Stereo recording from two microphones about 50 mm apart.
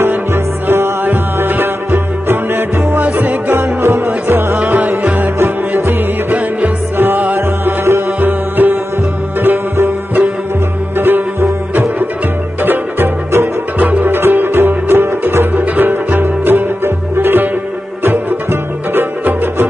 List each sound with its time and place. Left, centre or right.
0.0 s music: right
1.0 s music: right
3.5 s music: right
4.6 s music: right
7.3 s music: right
8.2 s music: right
11.0 s music: right
13.7 s music: right
14.1 s music: right